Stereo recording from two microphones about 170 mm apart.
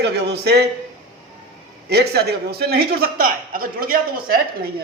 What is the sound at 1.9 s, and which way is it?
Speech, 70° right (ahead or behind).